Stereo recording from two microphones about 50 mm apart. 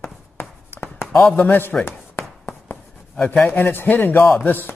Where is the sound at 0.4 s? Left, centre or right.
Left.